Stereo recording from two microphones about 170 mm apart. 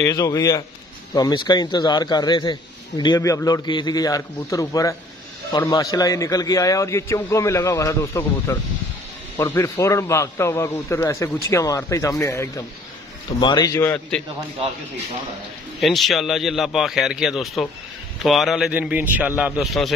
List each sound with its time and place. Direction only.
0.0 s a man's voice: 20° left (ahead or behind)
15.8 s speech: centre (ahead or behind)